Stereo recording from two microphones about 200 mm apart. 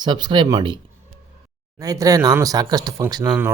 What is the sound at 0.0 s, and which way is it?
Speech, 20° right (ahead or behind).